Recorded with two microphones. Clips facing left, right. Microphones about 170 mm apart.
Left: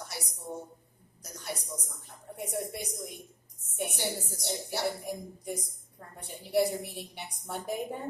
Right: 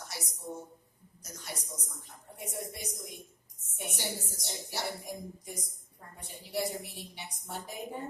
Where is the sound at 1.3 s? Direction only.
55° left (ahead or behind).